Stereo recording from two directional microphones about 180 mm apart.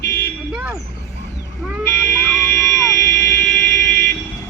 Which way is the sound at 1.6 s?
5° right (ahead or behind).